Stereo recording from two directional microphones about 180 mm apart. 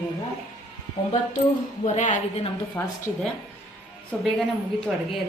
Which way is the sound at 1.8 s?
40° left (ahead or behind).